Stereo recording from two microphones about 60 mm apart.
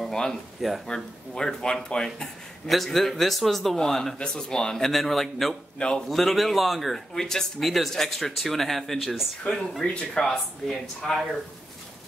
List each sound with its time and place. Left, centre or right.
0.0 s a sound: centre
0.6 s speech: centre
0.8 s speech: centre
2.7 s speech: centre
5.8 s speech: centre
6.0 s speech: centre